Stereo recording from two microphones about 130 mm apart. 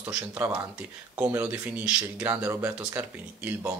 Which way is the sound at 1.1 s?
15° right (ahead or behind).